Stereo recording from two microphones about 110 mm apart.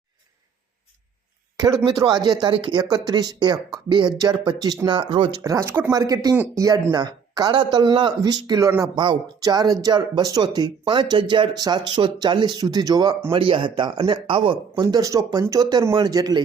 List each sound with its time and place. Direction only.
2.0 s speech: 40° right (ahead or behind)
5.4 s speech: 25° right (ahead or behind)
5.9 s speech: 35° right (ahead or behind)
13.3 s speech: 50° right (ahead or behind); by 16.4 s 35° right (ahead or behind)